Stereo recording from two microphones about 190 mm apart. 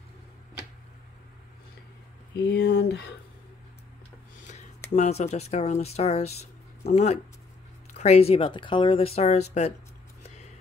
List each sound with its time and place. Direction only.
2.3 s speech: 65° left (ahead or behind)
4.9 s speech: 35° left (ahead or behind)